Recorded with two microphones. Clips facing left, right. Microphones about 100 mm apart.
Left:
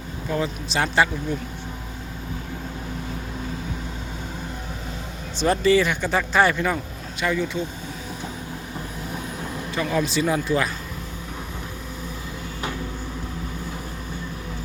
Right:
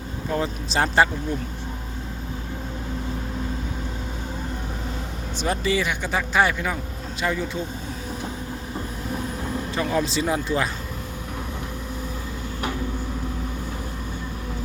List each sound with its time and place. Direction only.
0.3 s speech: 35° right (ahead or behind)
5.4 s speech: 10° right (ahead or behind)
7.2 s speech: 30° right (ahead or behind)
9.7 s speech: 30° right (ahead or behind)